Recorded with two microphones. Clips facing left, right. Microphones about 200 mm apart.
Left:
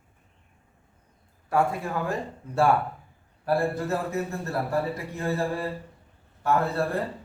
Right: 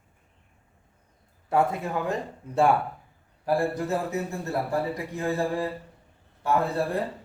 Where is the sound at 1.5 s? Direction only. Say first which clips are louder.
Right 1 dB; 20° right (ahead or behind).